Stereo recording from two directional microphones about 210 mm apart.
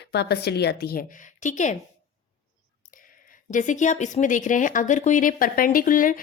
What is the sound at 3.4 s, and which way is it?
Speech, 35° left (ahead or behind).